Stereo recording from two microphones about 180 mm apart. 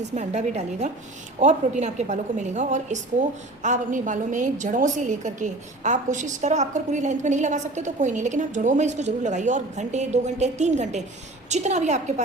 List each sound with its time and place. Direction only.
0.0 s a woman's voice: 40° right (ahead or behind)